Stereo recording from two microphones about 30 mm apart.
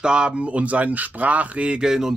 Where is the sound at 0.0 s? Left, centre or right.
Right.